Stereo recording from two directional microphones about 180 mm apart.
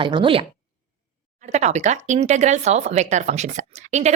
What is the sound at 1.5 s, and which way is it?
Speech, 40° right (ahead or behind).